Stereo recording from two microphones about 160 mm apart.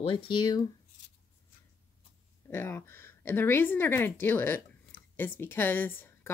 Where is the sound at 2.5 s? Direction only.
15° left (ahead or behind).